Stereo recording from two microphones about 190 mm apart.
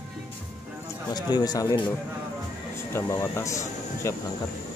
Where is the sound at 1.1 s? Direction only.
20° left (ahead or behind).